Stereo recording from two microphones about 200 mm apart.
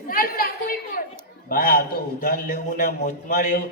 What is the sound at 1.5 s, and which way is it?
A man's voice, 45° left (ahead or behind).